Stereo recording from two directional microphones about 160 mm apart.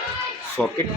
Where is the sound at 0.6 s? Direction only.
Centre (ahead or behind).